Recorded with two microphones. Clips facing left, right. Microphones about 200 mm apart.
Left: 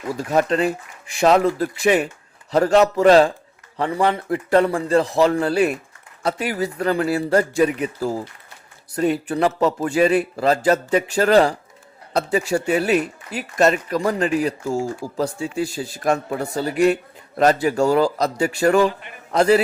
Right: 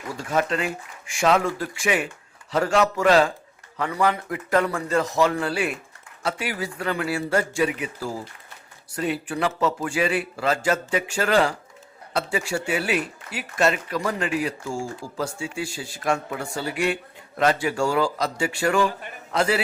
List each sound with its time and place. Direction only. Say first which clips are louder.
0.3 s a man's voice: left 5 dB; 35° left (ahead or behind)